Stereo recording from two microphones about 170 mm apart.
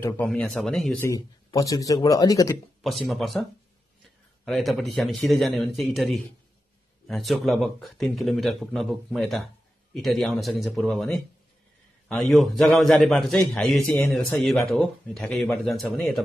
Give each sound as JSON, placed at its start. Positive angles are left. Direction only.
{"t": 0.3, "sound": "speech", "side_deg": 5}
{"t": 1.0, "sound": "speech", "side_deg": 20}
{"t": 2.8, "sound": "speech", "side_deg": 0}
{"t": 4.5, "sound": "speech", "side_deg": 0}